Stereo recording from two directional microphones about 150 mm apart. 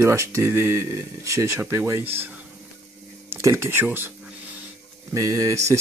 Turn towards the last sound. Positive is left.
turn(degrees=-20)  # may be behind; listen again after turning